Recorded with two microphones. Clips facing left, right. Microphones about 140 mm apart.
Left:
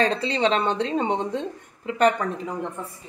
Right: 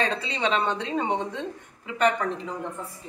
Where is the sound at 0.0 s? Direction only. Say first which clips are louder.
Left 5 dB; 35° left (ahead or behind).